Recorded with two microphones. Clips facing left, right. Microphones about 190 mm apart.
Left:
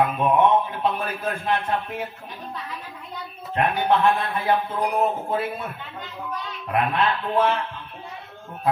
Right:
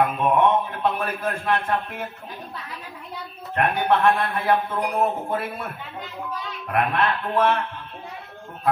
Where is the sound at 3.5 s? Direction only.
60° right (ahead or behind).